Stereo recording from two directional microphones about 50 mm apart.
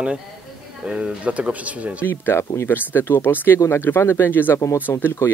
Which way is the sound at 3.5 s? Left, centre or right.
Left.